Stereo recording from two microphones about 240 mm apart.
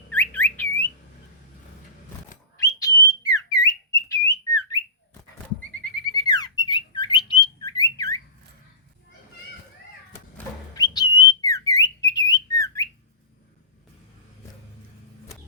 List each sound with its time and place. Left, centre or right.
0.1 s a sound: centre
2.6 s whistle: centre
6.1 s squawk: centre
10.3 s whistle: centre